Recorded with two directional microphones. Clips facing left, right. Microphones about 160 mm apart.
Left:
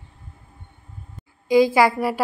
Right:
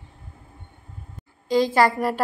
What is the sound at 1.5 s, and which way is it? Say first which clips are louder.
Speech: left 3 dB; 10° left (ahead or behind).